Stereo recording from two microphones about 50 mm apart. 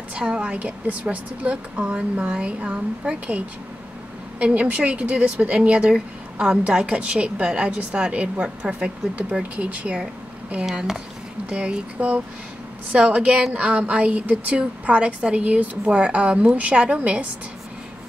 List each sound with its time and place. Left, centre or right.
0.1 s a woman's voice: right
4.7 s a woman's voice: right
11.4 s a woman's voice: right